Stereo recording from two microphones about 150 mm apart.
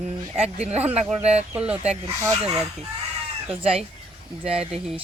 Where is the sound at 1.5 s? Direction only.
10° right (ahead or behind).